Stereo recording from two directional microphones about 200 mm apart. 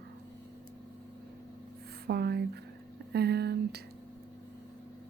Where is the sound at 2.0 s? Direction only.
55° right (ahead or behind).